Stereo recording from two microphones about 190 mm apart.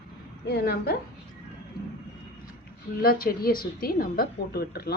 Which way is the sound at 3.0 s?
50° left (ahead or behind).